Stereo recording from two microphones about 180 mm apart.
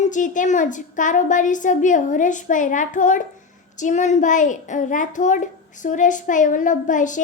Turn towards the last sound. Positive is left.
turn(degrees=45)  # may be behind; listen again after turning